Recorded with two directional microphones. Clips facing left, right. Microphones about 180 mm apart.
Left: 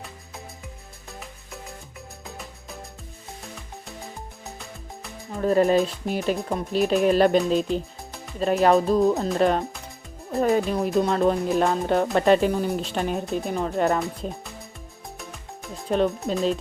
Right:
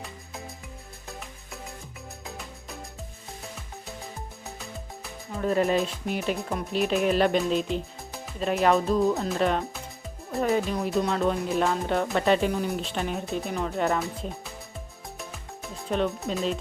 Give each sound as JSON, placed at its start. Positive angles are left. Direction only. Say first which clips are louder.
{"t": 2.2, "sound": "music", "louder": "even", "side_deg": 0}
{"t": 5.4, "sound": "speech", "louder": "left 5 dB", "side_deg": 40}
{"t": 16.3, "sound": "speech", "louder": "left 4 dB", "side_deg": 40}